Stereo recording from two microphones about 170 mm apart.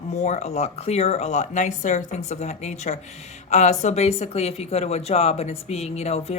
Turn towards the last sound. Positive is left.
turn(degrees=40)  # may be behind; listen again after turning